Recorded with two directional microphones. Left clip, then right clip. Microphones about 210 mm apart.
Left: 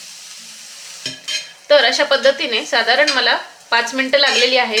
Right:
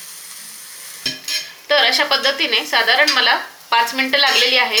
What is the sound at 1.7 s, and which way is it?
A woman's voice, 55° left (ahead or behind).